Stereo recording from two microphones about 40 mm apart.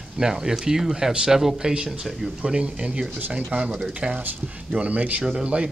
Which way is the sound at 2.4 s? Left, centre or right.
Right.